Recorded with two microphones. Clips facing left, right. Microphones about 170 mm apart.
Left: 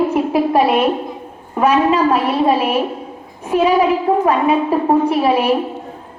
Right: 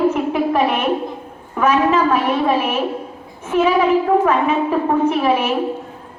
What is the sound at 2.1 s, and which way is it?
Speech, 35° left (ahead or behind).